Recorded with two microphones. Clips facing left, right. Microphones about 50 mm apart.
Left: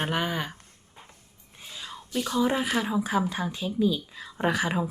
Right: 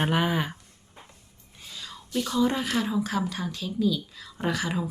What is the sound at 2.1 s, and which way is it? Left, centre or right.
Speech, centre.